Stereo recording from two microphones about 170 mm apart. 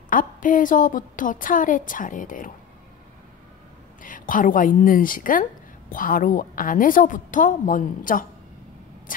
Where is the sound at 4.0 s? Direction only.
50° left (ahead or behind).